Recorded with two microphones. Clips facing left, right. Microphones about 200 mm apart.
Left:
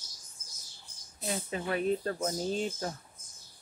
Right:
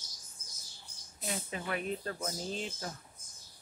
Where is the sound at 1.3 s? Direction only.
30° left (ahead or behind).